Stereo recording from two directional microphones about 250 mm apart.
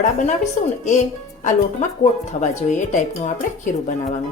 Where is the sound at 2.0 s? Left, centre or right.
Left.